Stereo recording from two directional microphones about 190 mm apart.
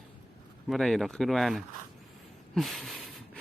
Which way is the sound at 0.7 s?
Centre (ahead or behind).